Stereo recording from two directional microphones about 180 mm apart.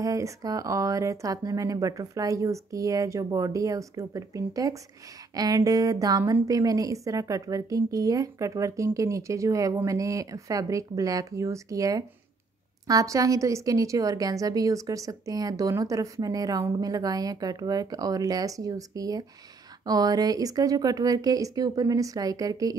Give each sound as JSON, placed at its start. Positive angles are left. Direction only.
{"t": 0.0, "sound": "a woman's voice", "side_deg": -20}